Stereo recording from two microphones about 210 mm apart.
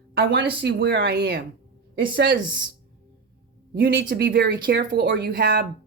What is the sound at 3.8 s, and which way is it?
Speech, 45° right (ahead or behind).